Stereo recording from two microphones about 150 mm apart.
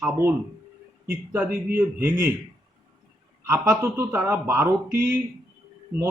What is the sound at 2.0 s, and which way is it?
Speech, 15° right (ahead or behind).